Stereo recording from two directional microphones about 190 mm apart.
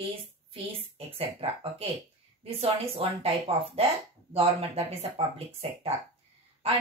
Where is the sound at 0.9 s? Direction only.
30° right (ahead or behind).